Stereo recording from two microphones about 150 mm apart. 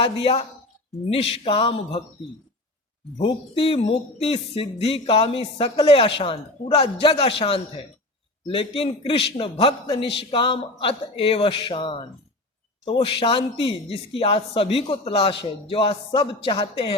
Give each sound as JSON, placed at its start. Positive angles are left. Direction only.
{"t": 0.0, "sound": "a man's voice", "side_deg": 40}
{"t": 3.2, "sound": "a man's voice", "side_deg": 35}